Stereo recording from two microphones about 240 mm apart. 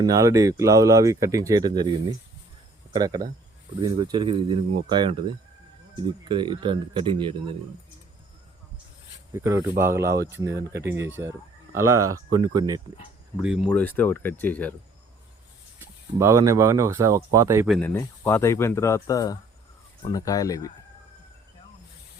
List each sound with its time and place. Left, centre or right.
0.0 s speech: centre
6.2 s speech: centre
9.3 s speech: centre
11.8 s speech: right
12.4 s speech: centre
13.4 s speech: centre
16.1 s speech: centre
17.7 s speech: centre